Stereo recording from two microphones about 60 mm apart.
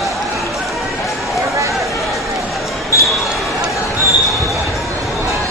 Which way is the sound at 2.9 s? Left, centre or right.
Left.